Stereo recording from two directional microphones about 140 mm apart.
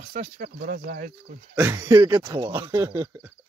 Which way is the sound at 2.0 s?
35° right (ahead or behind).